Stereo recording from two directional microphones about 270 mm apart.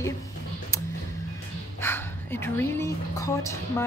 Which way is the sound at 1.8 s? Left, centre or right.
Centre.